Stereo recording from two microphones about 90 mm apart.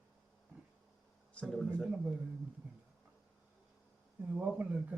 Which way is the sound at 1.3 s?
10° left (ahead or behind).